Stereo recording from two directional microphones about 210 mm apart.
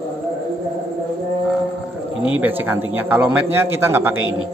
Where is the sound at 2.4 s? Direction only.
10° right (ahead or behind).